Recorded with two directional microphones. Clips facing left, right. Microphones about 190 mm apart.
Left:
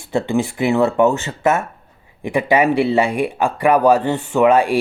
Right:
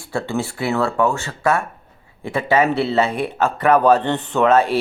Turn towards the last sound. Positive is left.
turn(degrees=15)  # may be behind; listen again after turning